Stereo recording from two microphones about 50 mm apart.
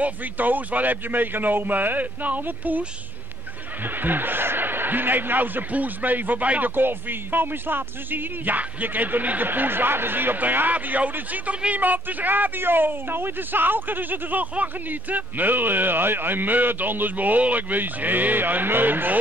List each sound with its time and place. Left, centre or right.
0.0 s speech: right
3.8 s speech: right
6.7 s speech: right